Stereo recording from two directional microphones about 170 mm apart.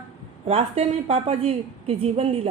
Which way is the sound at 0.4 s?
40° right (ahead or behind).